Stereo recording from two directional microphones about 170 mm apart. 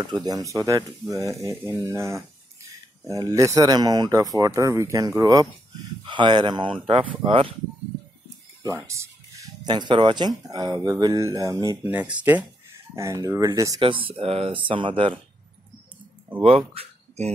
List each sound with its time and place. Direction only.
0.0 s speech: 25° right (ahead or behind)
1.9 s speech: 15° right (ahead or behind); by 7.5 s 30° right (ahead or behind)
8.6 s speech: 15° right (ahead or behind)
11.8 s speech: 10° right (ahead or behind)
13.8 s speech: 30° right (ahead or behind)
16.4 s speech: 35° right (ahead or behind)